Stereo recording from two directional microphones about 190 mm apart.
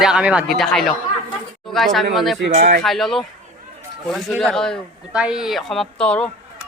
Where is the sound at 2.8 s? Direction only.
Centre (ahead or behind).